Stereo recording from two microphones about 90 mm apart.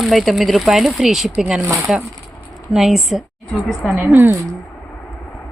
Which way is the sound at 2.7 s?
5° right (ahead or behind).